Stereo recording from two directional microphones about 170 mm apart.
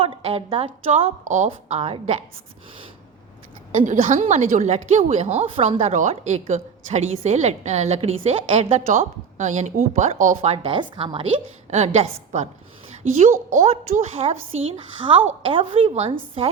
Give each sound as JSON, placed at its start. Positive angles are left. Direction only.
{"t": 0.0, "sound": "a woman's voice", "side_deg": -35}
{"t": 1.5, "sound": "a woman's voice", "side_deg": -35}
{"t": 3.8, "sound": "a woman's voice", "side_deg": -45}